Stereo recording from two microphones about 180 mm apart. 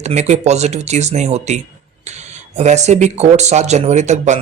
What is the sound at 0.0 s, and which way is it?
Speech, 40° right (ahead or behind).